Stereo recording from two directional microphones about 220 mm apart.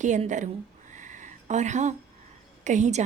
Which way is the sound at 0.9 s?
35° right (ahead or behind).